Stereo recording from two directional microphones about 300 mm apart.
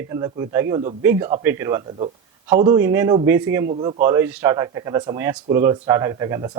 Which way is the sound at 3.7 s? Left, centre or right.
Centre.